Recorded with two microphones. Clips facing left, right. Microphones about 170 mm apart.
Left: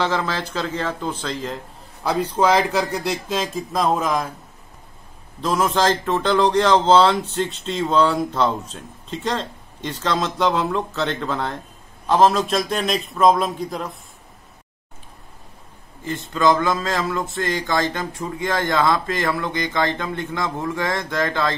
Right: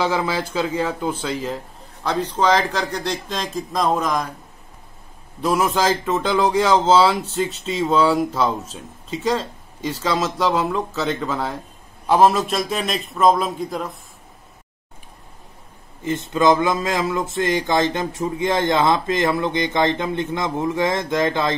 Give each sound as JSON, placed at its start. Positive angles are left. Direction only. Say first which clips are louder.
{"t": 0.0, "sound": "speech", "louder": "right 1 dB", "side_deg": -10}
{"t": 2.0, "sound": "a man's voice", "louder": "left 1 dB", "side_deg": 10}
{"t": 5.4, "sound": "a man's voice", "louder": "even", "side_deg": -10}
{"t": 16.3, "sound": "a man's voice", "louder": "right 1 dB", "side_deg": -20}